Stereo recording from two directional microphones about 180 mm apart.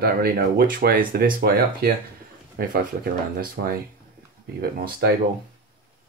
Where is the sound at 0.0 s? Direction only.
60° right (ahead or behind).